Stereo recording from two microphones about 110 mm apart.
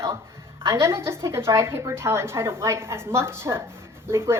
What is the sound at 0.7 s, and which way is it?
A woman's voice, 25° right (ahead or behind).